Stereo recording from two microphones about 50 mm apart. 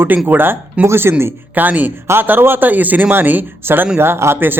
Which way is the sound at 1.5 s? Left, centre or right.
Right.